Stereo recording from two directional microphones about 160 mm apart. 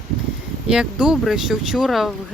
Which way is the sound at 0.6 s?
5° right (ahead or behind).